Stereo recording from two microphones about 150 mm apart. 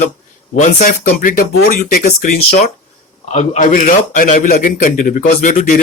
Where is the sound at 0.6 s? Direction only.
55° left (ahead or behind).